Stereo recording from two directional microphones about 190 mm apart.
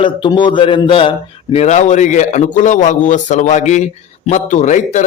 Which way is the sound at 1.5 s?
35° left (ahead or behind).